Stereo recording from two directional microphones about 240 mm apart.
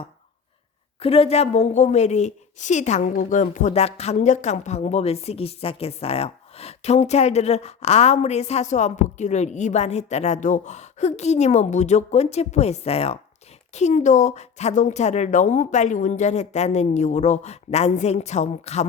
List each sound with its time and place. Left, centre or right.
0.9 s a woman's voice: left